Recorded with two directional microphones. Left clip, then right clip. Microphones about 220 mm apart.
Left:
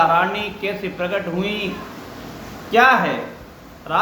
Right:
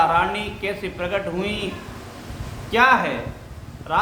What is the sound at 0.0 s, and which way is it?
Speech, 10° right (ahead or behind).